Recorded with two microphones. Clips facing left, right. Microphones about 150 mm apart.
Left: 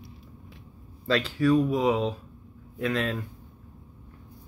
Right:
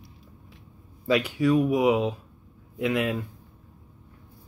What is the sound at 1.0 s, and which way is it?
Speech, 15° right (ahead or behind).